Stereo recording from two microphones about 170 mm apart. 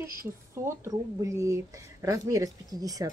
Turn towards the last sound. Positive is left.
turn(degrees=-20)  # may be behind; listen again after turning